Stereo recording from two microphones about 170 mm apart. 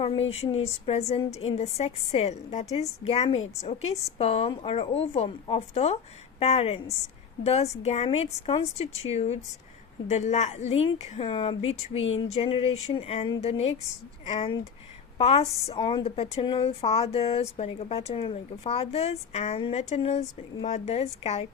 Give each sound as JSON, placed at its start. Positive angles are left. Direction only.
{"t": 0.0, "sound": "a woman's voice", "side_deg": 35}
{"t": 11.3, "sound": "a woman's voice", "side_deg": 30}